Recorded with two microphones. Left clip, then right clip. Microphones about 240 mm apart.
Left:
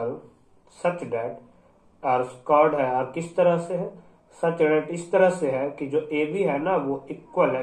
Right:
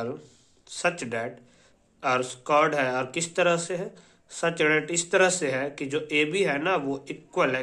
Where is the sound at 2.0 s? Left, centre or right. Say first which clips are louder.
Left 2 dB; right.